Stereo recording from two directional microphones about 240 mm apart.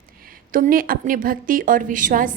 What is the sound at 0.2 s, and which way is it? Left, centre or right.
A woman's voice, right.